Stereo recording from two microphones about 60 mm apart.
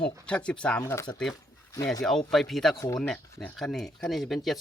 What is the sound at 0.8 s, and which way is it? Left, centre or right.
Speech, left.